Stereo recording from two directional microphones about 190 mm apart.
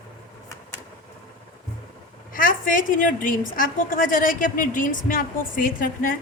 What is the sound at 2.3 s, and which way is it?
A woman's voice, 45° left (ahead or behind).